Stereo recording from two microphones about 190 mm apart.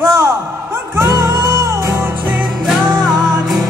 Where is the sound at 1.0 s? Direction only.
15° right (ahead or behind).